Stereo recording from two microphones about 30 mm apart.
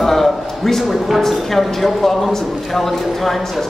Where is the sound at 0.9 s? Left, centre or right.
Centre.